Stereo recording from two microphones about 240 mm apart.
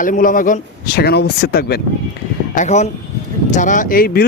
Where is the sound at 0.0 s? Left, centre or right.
Left.